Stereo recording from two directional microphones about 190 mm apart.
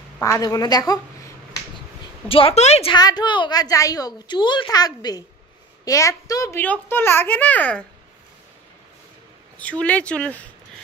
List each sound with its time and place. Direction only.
0.2 s a woman's voice: 15° left (ahead or behind)
2.2 s a woman's voice: 30° left (ahead or behind); by 7.8 s 10° left (ahead or behind)
9.6 s a child's voice: 5° left (ahead or behind)